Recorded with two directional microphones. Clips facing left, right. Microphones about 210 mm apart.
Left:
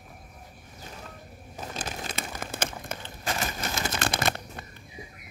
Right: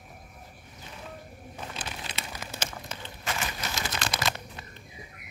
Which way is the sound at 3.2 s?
40° left (ahead or behind).